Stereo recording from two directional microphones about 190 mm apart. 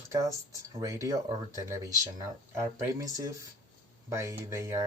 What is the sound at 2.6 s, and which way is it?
Speech, 15° right (ahead or behind).